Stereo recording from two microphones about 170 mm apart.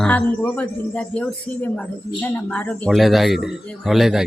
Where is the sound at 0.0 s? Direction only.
10° left (ahead or behind).